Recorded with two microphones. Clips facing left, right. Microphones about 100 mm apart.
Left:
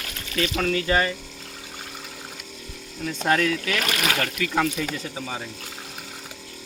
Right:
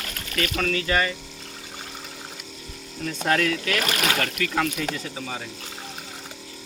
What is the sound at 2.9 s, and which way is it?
Speech, 5° left (ahead or behind).